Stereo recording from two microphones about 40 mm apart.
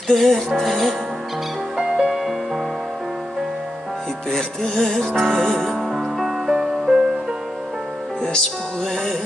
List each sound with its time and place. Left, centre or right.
0.1 s speech: centre
1.8 s music: centre
4.3 s music: centre
5.4 s speech: centre
5.8 s music: centre
8.2 s music: centre